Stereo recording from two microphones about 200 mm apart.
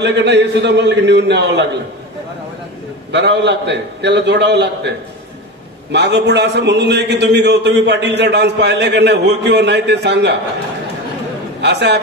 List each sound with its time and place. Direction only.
0.0 s a man's voice: 60° right (ahead or behind)
3.1 s a man's voice: 60° right (ahead or behind)
11.6 s a man's voice: 60° right (ahead or behind)